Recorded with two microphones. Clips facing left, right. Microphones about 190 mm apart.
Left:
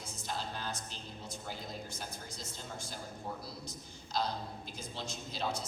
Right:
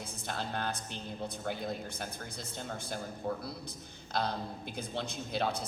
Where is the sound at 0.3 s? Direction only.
60° right (ahead or behind).